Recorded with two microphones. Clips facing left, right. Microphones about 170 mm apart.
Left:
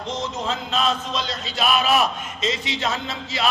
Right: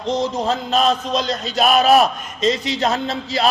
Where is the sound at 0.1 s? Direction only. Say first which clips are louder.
Right 8 dB; 35° right (ahead or behind).